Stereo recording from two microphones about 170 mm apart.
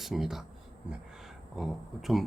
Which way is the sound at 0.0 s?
Centre (ahead or behind).